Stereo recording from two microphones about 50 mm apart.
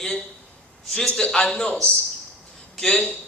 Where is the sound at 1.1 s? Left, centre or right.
Left.